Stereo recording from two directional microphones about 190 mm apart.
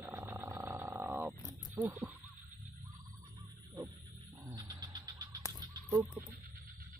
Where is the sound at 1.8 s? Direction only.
10° right (ahead or behind).